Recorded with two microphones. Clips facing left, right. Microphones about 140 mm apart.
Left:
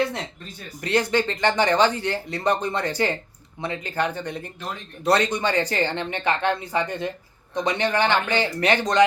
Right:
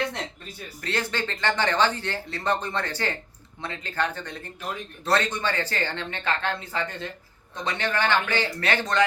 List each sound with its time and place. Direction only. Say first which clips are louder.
0.8 s speech: left 7 dB; 15° left (ahead or behind)